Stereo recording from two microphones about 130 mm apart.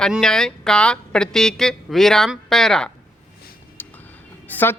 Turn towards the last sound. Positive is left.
turn(degrees=15)  # may be behind; listen again after turning